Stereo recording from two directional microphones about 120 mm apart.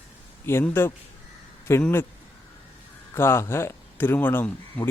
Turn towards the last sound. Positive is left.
turn(degrees=10)  # may be behind; listen again after turning